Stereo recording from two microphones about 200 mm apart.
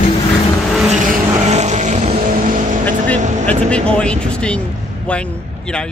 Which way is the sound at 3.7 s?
5° left (ahead or behind).